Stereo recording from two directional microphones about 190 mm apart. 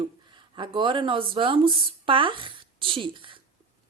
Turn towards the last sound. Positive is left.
turn(degrees=-25)  # may be behind; listen again after turning